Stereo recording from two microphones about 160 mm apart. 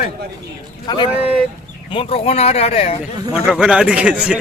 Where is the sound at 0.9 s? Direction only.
30° left (ahead or behind).